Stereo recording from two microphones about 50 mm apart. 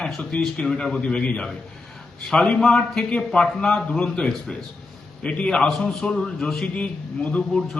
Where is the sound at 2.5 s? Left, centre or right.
Left.